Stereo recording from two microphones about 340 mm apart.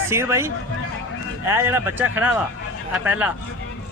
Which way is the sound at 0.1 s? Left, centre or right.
Centre.